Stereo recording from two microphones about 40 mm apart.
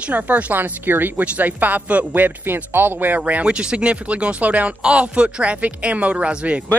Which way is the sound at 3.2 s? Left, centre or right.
Right.